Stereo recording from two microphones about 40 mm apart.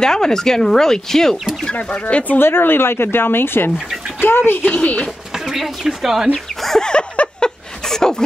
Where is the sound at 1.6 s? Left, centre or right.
Left.